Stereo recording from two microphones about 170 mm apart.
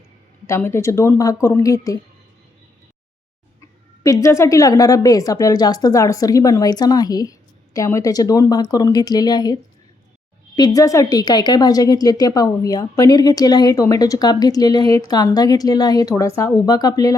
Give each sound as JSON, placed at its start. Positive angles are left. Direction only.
{"t": 0.4, "sound": "speech", "side_deg": 15}
{"t": 4.0, "sound": "a woman's voice", "side_deg": 20}